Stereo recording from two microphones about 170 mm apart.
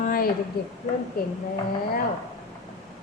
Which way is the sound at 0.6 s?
70° left (ahead or behind).